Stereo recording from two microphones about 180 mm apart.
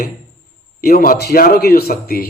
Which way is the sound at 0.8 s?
55° left (ahead or behind).